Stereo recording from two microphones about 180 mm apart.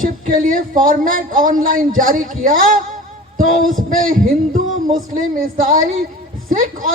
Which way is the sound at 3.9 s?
50° right (ahead or behind).